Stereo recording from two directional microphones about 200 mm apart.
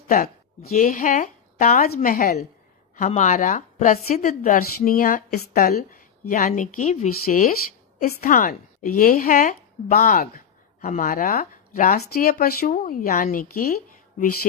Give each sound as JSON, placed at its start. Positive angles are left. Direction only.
{"t": 0.1, "sound": "a woman's voice", "side_deg": 45}